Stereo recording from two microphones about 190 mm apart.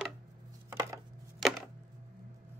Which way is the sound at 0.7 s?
15° right (ahead or behind).